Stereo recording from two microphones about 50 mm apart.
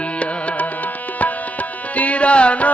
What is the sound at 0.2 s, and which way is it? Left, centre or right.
Tabla, left.